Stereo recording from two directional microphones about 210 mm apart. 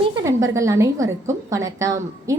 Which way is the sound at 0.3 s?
15° right (ahead or behind).